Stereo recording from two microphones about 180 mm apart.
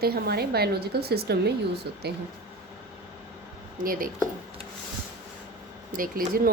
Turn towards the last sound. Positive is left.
turn(degrees=-50)  # may be behind; listen again after turning